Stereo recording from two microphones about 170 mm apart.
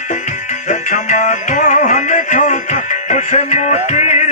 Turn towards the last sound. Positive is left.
turn(degrees=40)  # may be behind; listen again after turning